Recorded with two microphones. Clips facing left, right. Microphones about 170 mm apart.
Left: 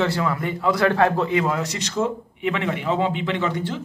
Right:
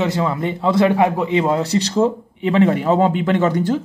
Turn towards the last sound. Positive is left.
turn(degrees=-40)  # may be behind; listen again after turning